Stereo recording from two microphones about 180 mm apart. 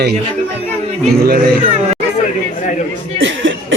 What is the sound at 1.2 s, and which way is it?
Speech, 60° right (ahead or behind).